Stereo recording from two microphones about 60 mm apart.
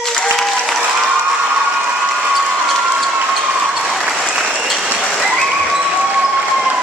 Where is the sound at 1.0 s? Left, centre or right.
Centre.